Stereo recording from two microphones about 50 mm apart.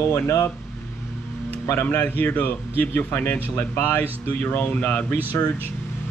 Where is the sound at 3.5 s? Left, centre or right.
Left.